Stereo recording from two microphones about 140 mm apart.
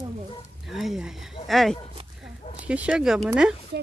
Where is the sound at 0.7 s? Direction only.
Centre (ahead or behind).